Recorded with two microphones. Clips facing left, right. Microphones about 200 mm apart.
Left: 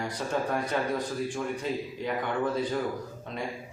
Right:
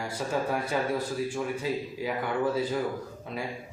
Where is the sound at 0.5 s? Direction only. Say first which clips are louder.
Even; 5° right (ahead or behind).